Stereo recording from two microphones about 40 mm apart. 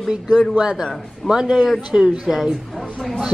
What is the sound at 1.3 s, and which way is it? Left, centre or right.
A woman's voice, centre.